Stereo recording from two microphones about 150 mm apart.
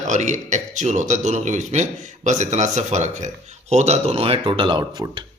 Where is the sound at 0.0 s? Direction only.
55° right (ahead or behind); by 5.2 s 30° right (ahead or behind).